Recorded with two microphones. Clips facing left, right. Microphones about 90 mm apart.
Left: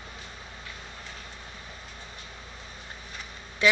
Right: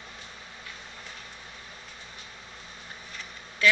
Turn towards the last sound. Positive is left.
turn(degrees=20)  # may be behind; listen again after turning